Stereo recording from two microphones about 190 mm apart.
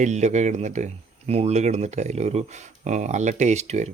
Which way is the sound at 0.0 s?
35° right (ahead or behind).